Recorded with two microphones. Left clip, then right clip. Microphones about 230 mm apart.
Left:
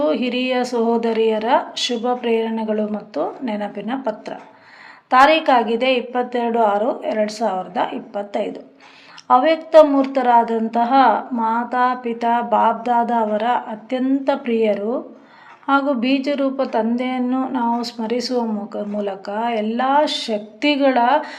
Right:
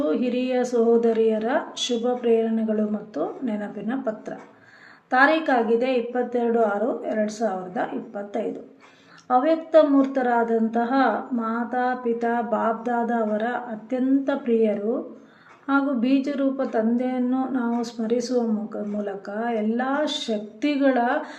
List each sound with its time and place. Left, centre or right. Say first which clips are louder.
0.0 s a woman's voice: left 5 dB; centre